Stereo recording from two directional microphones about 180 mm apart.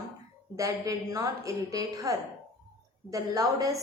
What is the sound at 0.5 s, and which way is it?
A woman's voice, 20° right (ahead or behind).